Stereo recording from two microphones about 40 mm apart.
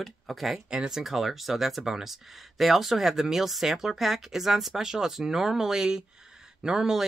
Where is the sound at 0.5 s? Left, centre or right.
Centre.